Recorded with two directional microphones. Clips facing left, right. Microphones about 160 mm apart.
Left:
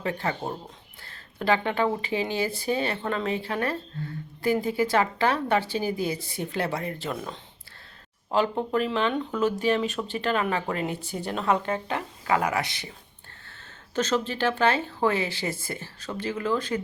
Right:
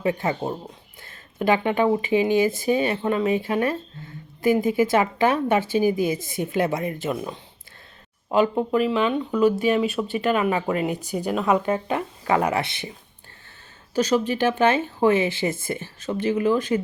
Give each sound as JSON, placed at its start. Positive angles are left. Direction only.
{"t": 0.0, "sound": "speech", "side_deg": -15}
{"t": 12.2, "sound": "speech", "side_deg": -30}
{"t": 13.9, "sound": "speech", "side_deg": -10}